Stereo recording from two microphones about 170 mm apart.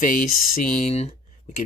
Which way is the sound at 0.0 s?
50° left (ahead or behind).